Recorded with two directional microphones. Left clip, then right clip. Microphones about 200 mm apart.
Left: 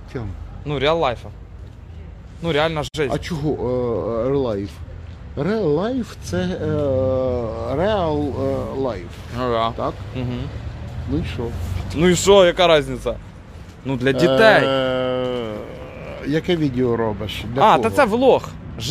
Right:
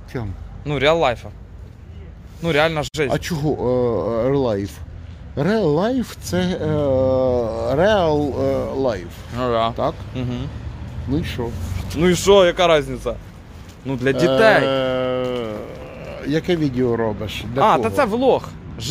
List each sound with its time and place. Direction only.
0.1 s speech: 55° right (ahead or behind)
0.7 s speech: 20° right (ahead or behind)
2.4 s speech: 20° right (ahead or behind)
3.1 s speech: 50° right (ahead or behind)
9.3 s speech: 15° right (ahead or behind)
11.1 s speech: 55° right (ahead or behind)
12.0 s speech: centre (ahead or behind)
17.6 s speech: 10° left (ahead or behind)